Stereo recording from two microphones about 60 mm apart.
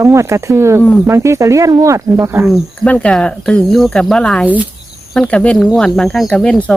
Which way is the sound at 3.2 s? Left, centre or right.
Centre.